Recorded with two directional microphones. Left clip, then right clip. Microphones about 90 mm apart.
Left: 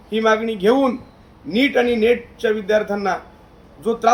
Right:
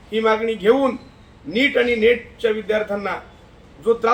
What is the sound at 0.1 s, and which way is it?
A man's voice, 15° left (ahead or behind).